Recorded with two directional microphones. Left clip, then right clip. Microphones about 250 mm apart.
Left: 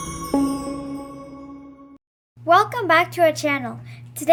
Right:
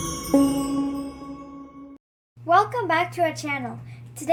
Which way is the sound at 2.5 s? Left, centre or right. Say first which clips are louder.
Left 4 dB; left.